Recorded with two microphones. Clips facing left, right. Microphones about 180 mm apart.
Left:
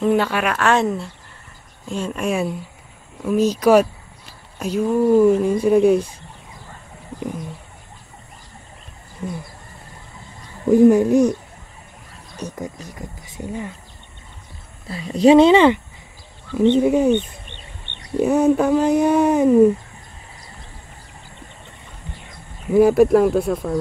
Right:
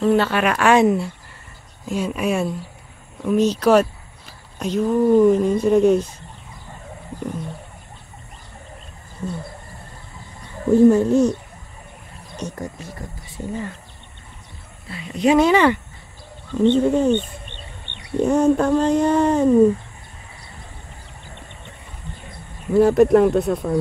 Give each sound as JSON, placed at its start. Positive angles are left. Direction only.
{"t": 0.0, "sound": "speech", "side_deg": 10}
{"t": 0.7, "sound": "speech", "side_deg": -10}
{"t": 3.3, "sound": "speech", "side_deg": 10}
{"t": 10.7, "sound": "speech", "side_deg": 15}
{"t": 12.4, "sound": "speech", "side_deg": 5}
{"t": 14.9, "sound": "speech", "side_deg": 35}
{"t": 16.5, "sound": "speech", "side_deg": 10}
{"t": 18.2, "sound": "speech", "side_deg": 5}
{"t": 22.7, "sound": "speech", "side_deg": 10}